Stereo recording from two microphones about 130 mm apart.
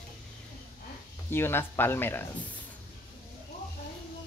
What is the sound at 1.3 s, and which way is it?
Speech, 15° left (ahead or behind).